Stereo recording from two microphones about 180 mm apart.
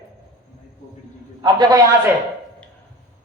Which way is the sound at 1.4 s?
25° right (ahead or behind).